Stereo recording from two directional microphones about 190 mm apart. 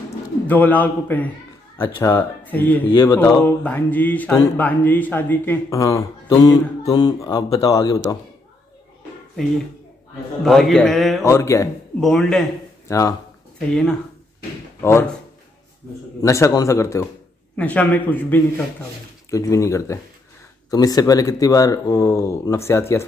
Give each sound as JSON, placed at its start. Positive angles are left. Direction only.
{"t": 0.5, "sound": "speech", "side_deg": 10}
{"t": 2.9, "sound": "speech", "side_deg": 25}
{"t": 3.2, "sound": "speech", "side_deg": 10}
{"t": 10.4, "sound": "a man's voice", "side_deg": 0}
{"t": 11.2, "sound": "speech", "side_deg": 15}
{"t": 12.0, "sound": "a man's voice", "side_deg": 0}
{"t": 12.8, "sound": "speech", "side_deg": 15}
{"t": 13.6, "sound": "a man's voice", "side_deg": 5}
{"t": 16.2, "sound": "speech", "side_deg": 15}